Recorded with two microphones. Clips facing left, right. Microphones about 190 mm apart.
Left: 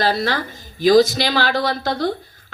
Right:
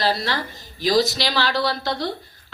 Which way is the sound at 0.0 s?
55° left (ahead or behind).